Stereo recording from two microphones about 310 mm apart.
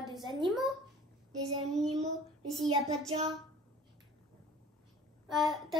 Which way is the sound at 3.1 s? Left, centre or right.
Centre.